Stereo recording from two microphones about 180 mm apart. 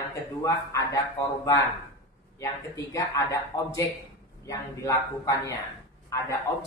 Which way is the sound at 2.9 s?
15° left (ahead or behind).